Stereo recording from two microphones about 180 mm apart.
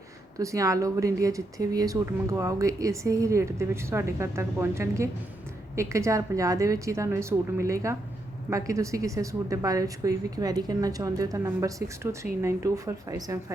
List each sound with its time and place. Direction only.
0.3 s speech: 20° right (ahead or behind)